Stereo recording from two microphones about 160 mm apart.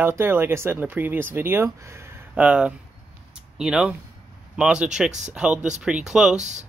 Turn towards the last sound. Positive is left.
turn(degrees=-45)  # may be behind; listen again after turning